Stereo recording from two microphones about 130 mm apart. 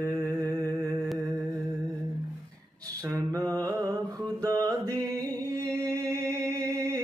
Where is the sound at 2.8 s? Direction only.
25° right (ahead or behind).